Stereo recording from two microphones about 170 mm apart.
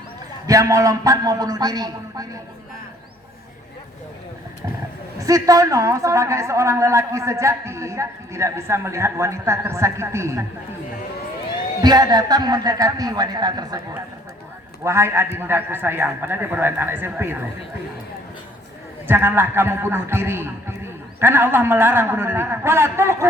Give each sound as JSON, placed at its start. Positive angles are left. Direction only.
{"t": 0.4, "sound": "a man's voice", "side_deg": -20}
{"t": 5.2, "sound": "a woman's voice", "side_deg": -20}
{"t": 11.8, "sound": "a man's voice", "side_deg": -25}
{"t": 19.0, "sound": "a woman's voice", "side_deg": -15}